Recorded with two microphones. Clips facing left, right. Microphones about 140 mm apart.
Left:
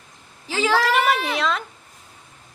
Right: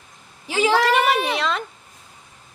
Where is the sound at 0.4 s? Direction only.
15° right (ahead or behind).